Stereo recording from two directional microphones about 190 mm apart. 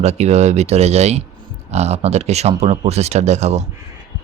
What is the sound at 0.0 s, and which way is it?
Speech, 35° right (ahead or behind).